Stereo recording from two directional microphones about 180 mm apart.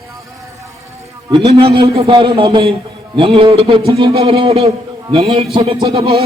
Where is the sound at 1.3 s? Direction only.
30° right (ahead or behind).